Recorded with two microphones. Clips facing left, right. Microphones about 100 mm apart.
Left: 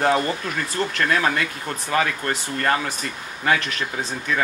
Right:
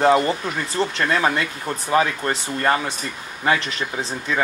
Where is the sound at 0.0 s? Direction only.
25° right (ahead or behind).